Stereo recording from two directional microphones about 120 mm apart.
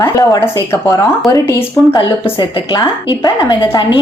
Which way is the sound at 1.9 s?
40° left (ahead or behind).